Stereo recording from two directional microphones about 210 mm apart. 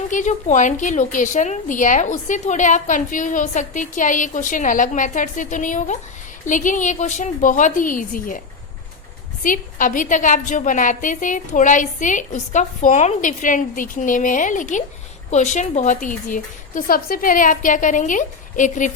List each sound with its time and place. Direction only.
0.1 s a woman's voice: 35° left (ahead or behind)
9.4 s a woman's voice: 40° left (ahead or behind)